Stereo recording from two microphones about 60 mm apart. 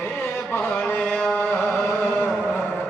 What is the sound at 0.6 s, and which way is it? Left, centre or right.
Music, centre.